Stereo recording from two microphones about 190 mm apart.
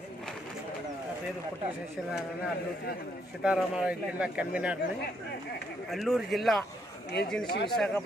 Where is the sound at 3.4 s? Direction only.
5° right (ahead or behind).